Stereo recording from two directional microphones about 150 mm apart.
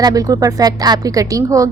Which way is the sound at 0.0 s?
25° right (ahead or behind).